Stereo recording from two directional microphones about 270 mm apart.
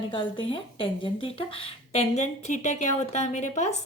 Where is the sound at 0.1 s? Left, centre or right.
Centre.